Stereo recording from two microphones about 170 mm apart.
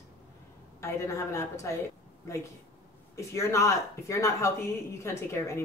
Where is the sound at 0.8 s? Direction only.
15° left (ahead or behind).